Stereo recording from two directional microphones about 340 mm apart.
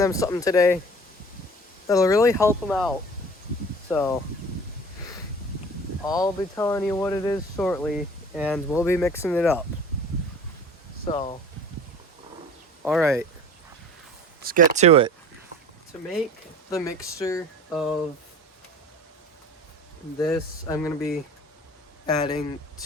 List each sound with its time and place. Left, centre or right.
0.0 s speech: centre
1.9 s speech: centre
3.9 s speech: centre
6.1 s speech: centre
11.0 s speech: centre
12.8 s speech: centre
14.4 s speech: right
16.6 s speech: centre
20.1 s speech: centre